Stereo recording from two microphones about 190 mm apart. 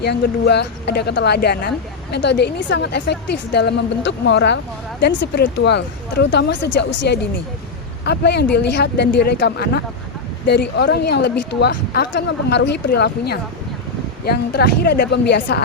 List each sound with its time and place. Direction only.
0.0 s a woman's voice: 60° left (ahead or behind)